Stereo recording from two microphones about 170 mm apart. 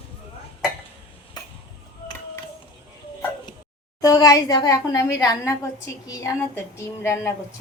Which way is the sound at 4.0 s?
20° left (ahead or behind).